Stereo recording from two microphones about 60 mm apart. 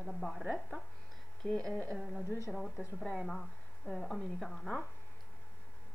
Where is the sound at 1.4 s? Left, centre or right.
Left.